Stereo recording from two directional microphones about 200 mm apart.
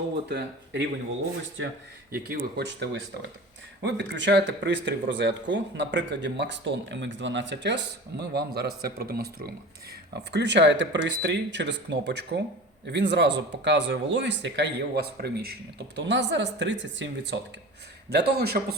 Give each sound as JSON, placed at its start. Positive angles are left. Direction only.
{"t": 0.3, "sound": "speech", "side_deg": -60}
{"t": 2.1, "sound": "speech", "side_deg": -50}